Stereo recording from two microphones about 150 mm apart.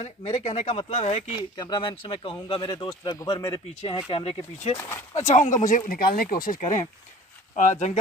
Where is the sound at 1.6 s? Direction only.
30° left (ahead or behind).